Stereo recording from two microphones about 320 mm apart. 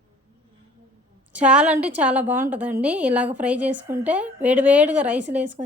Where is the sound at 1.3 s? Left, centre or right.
Centre.